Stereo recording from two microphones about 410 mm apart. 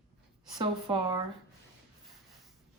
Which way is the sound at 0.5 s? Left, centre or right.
Centre.